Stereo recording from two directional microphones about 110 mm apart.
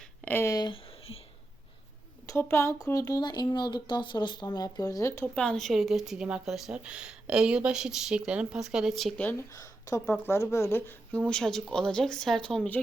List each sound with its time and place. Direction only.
0.3 s speech: 20° left (ahead or behind)
2.4 s speech: 25° left (ahead or behind)
5.2 s speech: 10° left (ahead or behind)
9.6 s speech: 30° left (ahead or behind)
11.3 s speech: 5° left (ahead or behind)